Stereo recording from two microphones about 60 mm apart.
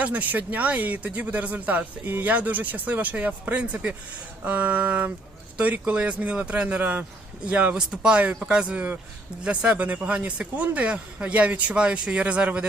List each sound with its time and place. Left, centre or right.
0.0 s speech: right
7.8 s speech: centre